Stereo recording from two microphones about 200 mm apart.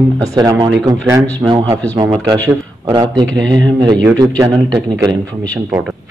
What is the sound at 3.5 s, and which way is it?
Speech, 20° right (ahead or behind).